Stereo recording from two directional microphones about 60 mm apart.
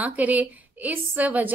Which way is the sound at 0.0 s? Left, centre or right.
Right.